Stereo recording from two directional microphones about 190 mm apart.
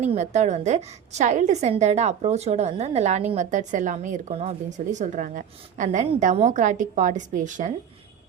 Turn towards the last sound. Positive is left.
turn(degrees=-40)  # may be behind; listen again after turning